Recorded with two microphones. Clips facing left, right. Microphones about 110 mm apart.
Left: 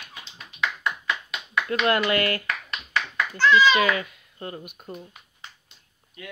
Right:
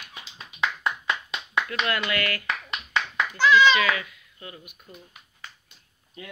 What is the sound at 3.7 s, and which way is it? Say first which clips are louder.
Speech: left 3 dB; 35° left (ahead or behind).